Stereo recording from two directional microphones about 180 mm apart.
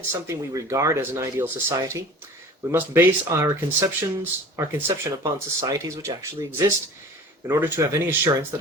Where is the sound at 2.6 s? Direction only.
10° right (ahead or behind).